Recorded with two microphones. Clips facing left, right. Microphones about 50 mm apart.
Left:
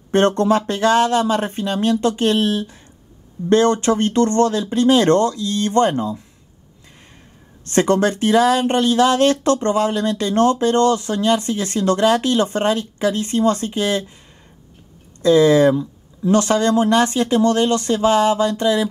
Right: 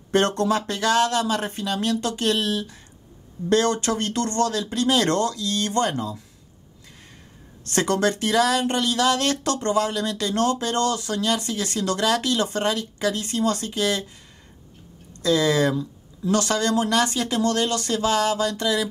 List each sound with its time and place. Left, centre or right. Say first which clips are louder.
0.1 s speech: left 5 dB; left
7.6 s speech: left 5 dB; left
15.2 s speech: left 8 dB; left